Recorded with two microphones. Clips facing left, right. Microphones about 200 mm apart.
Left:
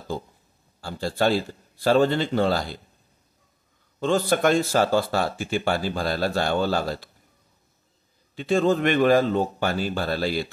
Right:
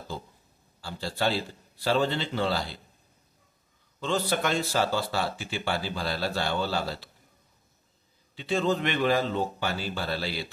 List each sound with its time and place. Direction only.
0.7 s speech: 45° left (ahead or behind)
4.0 s speech: 50° left (ahead or behind)
8.4 s speech: 50° left (ahead or behind)